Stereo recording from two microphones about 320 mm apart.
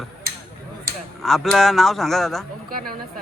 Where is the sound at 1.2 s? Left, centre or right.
Centre.